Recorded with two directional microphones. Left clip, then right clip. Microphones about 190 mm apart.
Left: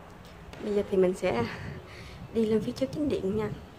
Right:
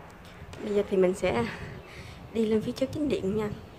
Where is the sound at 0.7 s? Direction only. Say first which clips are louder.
Right 1 dB; 5° right (ahead or behind).